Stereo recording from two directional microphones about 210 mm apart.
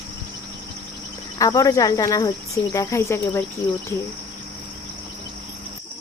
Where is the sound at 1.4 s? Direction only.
15° left (ahead or behind).